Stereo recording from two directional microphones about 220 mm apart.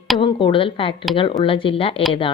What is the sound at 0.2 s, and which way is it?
Speech, 20° left (ahead or behind).